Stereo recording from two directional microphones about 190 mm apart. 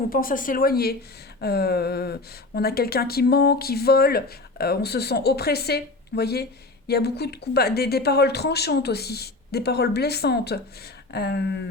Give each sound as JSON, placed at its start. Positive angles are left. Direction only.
{"t": 0.1, "sound": "speech", "side_deg": 45}